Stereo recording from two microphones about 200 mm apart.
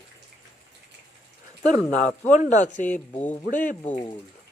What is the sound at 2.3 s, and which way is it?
Speech, 35° left (ahead or behind).